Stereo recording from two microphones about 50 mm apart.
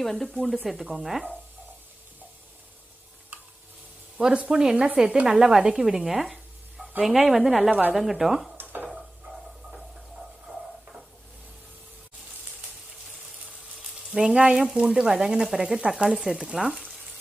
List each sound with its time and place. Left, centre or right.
0.0 s speech: centre
4.2 s speech: centre
4.8 s speech: right
5.2 s speech: centre
10.5 s a sound: right
14.1 s speech: centre
16.2 s speech: centre